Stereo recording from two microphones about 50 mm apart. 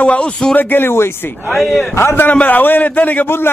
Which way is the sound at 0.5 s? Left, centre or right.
Left.